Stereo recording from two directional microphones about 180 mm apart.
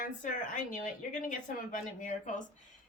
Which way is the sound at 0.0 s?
45° left (ahead or behind).